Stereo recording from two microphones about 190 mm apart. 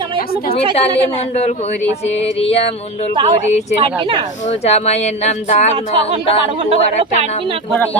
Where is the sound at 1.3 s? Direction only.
35° left (ahead or behind).